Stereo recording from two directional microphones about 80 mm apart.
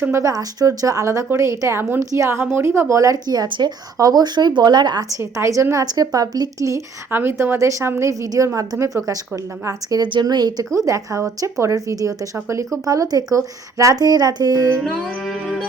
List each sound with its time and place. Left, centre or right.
0.0 s a woman's voice: right
3.9 s speech: right
5.0 s a woman's voice: right
5.7 s speech: right
7.1 s a woman's voice: right
10.0 s speech: right
10.8 s speech: right
15.0 s music: centre